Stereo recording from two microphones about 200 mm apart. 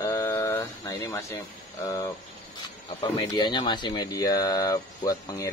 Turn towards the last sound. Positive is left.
turn(degrees=20)  # may be behind; listen again after turning